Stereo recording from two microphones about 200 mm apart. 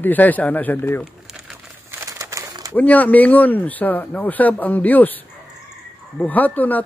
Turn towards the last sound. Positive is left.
turn(degrees=10)  # may be behind; listen again after turning